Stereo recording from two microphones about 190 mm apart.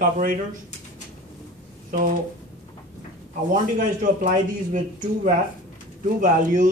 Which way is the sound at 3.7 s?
45° right (ahead or behind).